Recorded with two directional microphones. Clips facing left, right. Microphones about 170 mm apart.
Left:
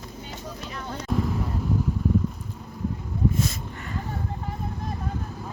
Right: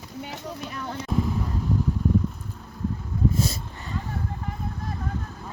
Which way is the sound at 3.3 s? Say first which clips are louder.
Right 1 dB; 35° right (ahead or behind).